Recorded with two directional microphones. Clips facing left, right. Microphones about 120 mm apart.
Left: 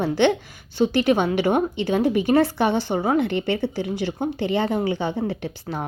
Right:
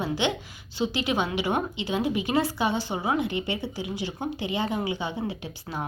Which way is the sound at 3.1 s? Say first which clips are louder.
Left 6 dB; 60° left (ahead or behind).